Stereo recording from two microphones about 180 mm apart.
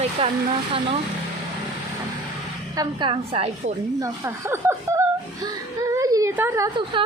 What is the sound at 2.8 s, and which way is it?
Speech, 30° right (ahead or behind).